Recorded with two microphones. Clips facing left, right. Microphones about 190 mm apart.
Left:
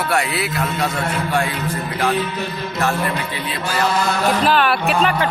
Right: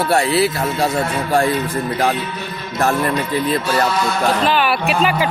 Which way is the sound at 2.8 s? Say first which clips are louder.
Right 4 dB; 45° right (ahead or behind).